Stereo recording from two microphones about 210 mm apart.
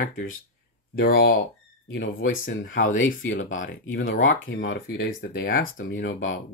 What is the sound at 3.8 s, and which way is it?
Speech, 70° left (ahead or behind).